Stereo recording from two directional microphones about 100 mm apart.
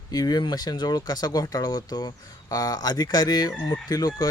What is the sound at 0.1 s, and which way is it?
Speech, 40° left (ahead or behind).